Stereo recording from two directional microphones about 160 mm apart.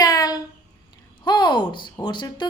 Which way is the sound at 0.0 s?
25° left (ahead or behind).